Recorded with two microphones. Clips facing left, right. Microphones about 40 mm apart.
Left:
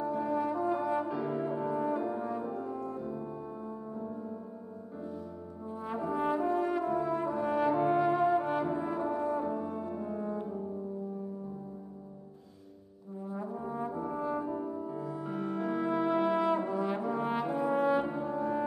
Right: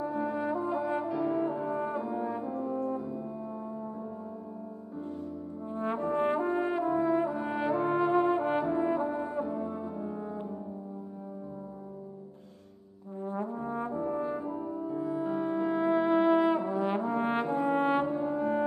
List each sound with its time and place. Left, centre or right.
0.0 s brass instrument: centre
1.0 s french horn: centre
1.4 s brass instrument: centre
1.7 s brass instrument: centre
2.0 s brass instrument: centre
5.7 s brass instrument: right; by 7.7 s centre
7.7 s brass instrument: centre
8.1 s brass instrument: right
9.5 s brass instrument: centre
13.2 s brass instrument: right; by 16.8 s centre
16.8 s brass instrument: right
18.0 s brass instrument: centre